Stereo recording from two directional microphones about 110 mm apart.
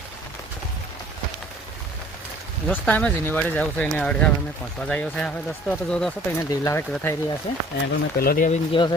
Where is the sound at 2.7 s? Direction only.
15° left (ahead or behind).